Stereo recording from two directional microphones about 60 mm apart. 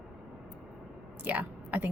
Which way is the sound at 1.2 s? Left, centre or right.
Right.